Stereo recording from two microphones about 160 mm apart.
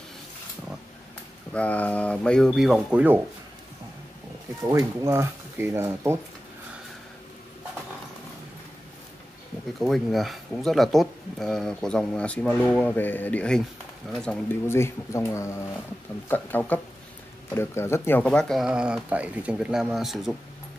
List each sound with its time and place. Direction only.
1.5 s speech: 10° left (ahead or behind); by 3.2 s 10° right (ahead or behind)
4.6 s speech: 20° right (ahead or behind)
9.8 s speech: centre (ahead or behind)
18.2 s speech: 5° left (ahead or behind)